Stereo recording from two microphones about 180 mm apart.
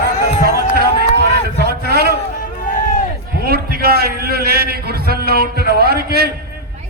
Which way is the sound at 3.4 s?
60° right (ahead or behind).